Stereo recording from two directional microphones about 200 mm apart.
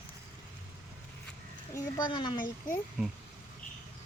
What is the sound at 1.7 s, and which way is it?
Speech, 25° left (ahead or behind).